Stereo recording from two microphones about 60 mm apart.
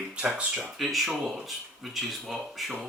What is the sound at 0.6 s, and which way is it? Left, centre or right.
Speech, centre.